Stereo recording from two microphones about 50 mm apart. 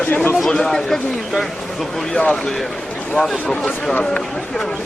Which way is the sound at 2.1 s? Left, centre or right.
Centre.